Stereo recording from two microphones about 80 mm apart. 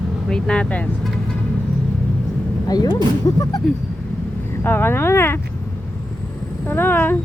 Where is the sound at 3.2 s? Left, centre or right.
Left.